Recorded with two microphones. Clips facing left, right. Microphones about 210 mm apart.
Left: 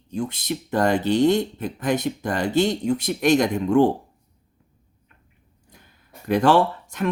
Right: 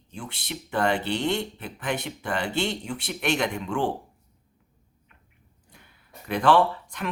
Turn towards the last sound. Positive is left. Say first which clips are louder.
# left 2 dB
turn(degrees=40)  # may be behind; listen again after turning